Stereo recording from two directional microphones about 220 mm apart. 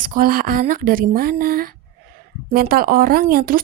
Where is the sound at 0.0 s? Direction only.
40° right (ahead or behind).